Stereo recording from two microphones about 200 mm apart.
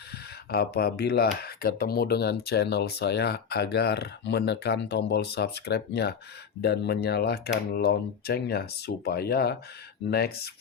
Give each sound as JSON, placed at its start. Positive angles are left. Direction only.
{"t": 0.5, "sound": "speech", "side_deg": 50}